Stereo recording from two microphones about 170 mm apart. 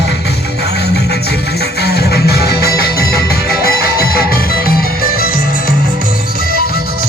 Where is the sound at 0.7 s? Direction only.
75° left (ahead or behind).